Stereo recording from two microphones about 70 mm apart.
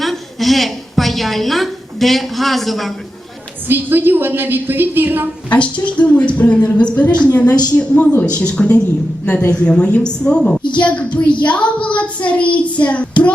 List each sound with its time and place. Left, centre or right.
0.0 s a sound: centre
3.7 s a woman's voice: right
5.5 s a woman's voice: centre
7.2 s child singing: left
8.4 s a woman's voice: centre
11.9 s child singing: centre